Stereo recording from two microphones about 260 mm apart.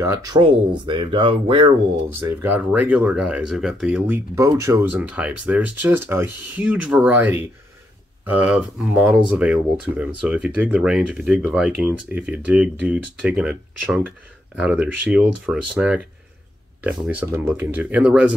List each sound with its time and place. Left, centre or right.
0.0 s speech: centre
0.4 s speech: centre
2.1 s speech: centre